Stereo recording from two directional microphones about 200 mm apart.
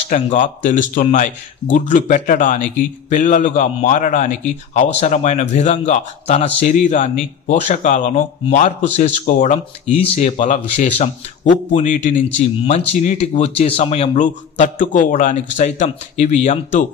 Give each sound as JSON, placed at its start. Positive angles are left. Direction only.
{"t": 0.1, "sound": "a man's voice", "side_deg": 40}